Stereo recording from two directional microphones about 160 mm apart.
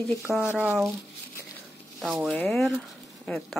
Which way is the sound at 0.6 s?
10° right (ahead or behind).